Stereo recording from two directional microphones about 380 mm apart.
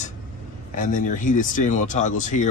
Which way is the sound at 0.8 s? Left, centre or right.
Centre.